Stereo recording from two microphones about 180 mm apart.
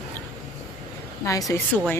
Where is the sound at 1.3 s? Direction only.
20° left (ahead or behind).